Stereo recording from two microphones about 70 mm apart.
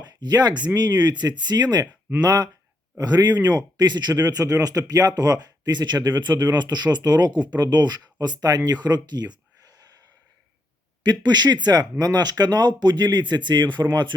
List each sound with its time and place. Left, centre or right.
0.0 s speech: right
1.9 s a sound: right
2.2 s speech: right
11.0 s speech: right